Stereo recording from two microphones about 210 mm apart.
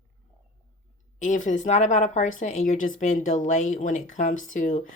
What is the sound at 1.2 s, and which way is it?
Speech, 35° left (ahead or behind).